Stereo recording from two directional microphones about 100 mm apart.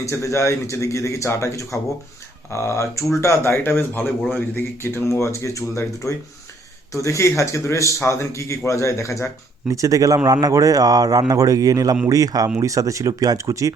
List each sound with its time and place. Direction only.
0.0 s speech: 30° left (ahead or behind)
9.6 s speech: 30° right (ahead or behind)